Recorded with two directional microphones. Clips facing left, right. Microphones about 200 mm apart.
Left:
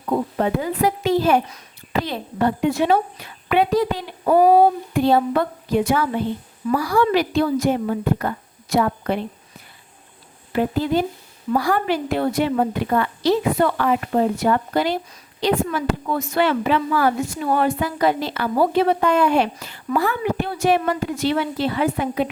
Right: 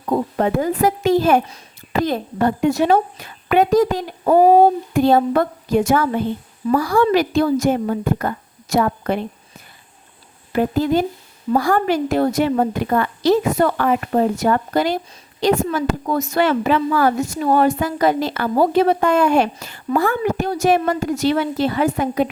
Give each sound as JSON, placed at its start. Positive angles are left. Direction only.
{"t": 0.1, "sound": "a woman's voice", "side_deg": -45}
{"t": 10.5, "sound": "a woman's voice", "side_deg": -45}